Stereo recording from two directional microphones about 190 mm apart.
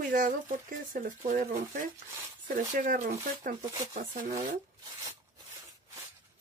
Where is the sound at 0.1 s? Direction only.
45° right (ahead or behind).